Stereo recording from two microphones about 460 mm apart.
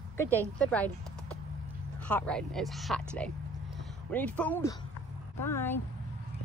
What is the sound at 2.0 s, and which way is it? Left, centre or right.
Speech, centre.